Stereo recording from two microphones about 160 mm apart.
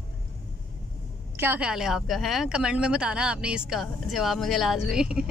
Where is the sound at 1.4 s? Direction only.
10° right (ahead or behind).